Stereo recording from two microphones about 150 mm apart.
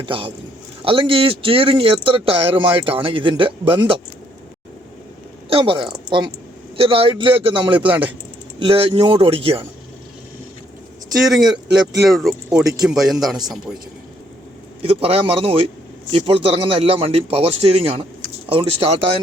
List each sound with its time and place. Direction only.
0.0 s a man's voice: 35° right (ahead or behind)
5.5 s a man's voice: 35° right (ahead or behind)
7.9 s speech: 10° right (ahead or behind)
8.5 s a man's voice: 35° right (ahead or behind)
11.1 s speech: centre (ahead or behind)
14.8 s a man's voice: 40° right (ahead or behind)